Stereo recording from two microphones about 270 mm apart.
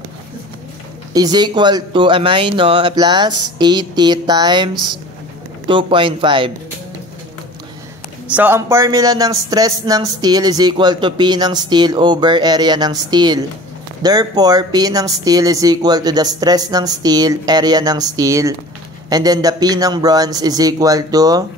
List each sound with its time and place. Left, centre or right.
1.1 s a man's voice: centre
5.7 s speech: centre
8.3 s a man's voice: centre